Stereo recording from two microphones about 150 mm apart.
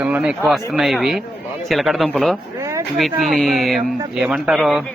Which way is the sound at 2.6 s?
20° right (ahead or behind).